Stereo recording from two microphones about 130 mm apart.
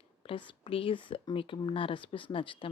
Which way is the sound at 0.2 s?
45° left (ahead or behind).